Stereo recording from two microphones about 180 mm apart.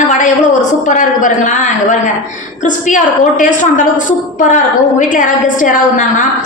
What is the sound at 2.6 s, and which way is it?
A woman's voice, 45° left (ahead or behind).